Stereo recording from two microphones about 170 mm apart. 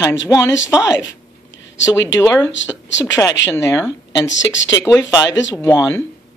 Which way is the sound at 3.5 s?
15° left (ahead or behind).